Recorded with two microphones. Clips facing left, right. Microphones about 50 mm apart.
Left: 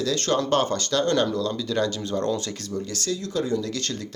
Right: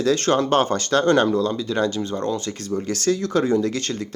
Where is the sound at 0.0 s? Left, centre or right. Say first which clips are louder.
Right 5 dB; right.